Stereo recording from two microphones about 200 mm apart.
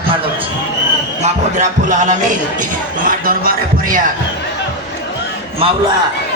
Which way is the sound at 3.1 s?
45° right (ahead or behind).